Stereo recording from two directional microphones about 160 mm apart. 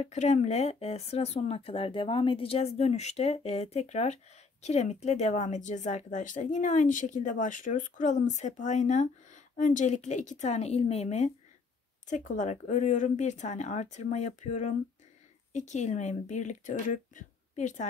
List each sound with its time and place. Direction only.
0.0 s speech: 45° left (ahead or behind)